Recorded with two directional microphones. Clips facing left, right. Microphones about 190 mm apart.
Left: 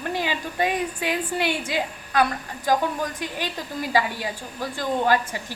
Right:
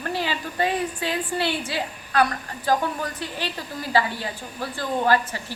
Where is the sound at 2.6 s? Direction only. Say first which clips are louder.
Left 1 dB; 15° left (ahead or behind).